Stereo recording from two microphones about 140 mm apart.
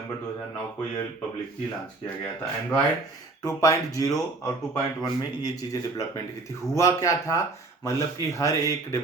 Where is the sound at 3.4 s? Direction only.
25° left (ahead or behind).